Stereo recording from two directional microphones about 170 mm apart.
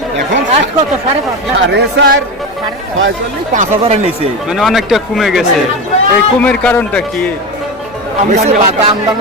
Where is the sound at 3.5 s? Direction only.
40° right (ahead or behind).